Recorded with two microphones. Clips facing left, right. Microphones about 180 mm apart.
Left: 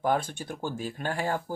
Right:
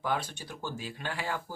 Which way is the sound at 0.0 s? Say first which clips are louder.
Left 6 dB; 50° left (ahead or behind).